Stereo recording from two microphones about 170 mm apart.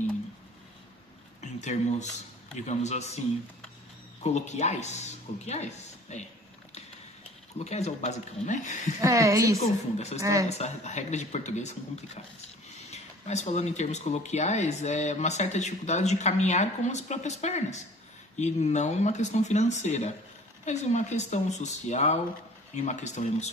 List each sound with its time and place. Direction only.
1.4 s speech: 45° left (ahead or behind)
4.2 s speech: 40° left (ahead or behind)
7.5 s speech: 40° left (ahead or behind)
9.0 s a woman's voice: 20° right (ahead or behind)
9.6 s speech: 40° left (ahead or behind)